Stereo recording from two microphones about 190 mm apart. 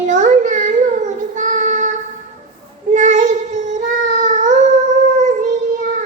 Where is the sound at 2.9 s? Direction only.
40° right (ahead or behind).